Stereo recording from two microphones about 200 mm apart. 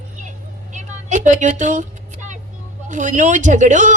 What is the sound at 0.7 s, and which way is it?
Vehicle, 40° right (ahead or behind).